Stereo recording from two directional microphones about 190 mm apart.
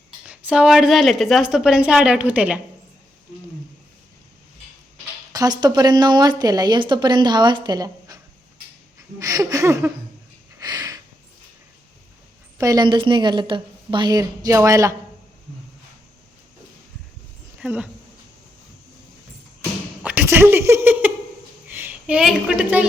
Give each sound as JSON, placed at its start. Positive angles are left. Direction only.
{"t": 0.3, "sound": "a woman's voice", "side_deg": -5}
{"t": 5.3, "sound": "speech", "side_deg": -20}
{"t": 9.1, "sound": "a sound", "side_deg": -15}
{"t": 12.5, "sound": "speech", "side_deg": -20}
{"t": 17.6, "sound": "speech", "side_deg": -5}
{"t": 20.0, "sound": "a woman's voice", "side_deg": -10}